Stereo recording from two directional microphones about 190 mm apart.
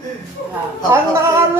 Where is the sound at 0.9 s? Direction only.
15° right (ahead or behind).